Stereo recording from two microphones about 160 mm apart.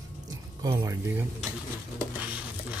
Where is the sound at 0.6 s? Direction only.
20° right (ahead or behind).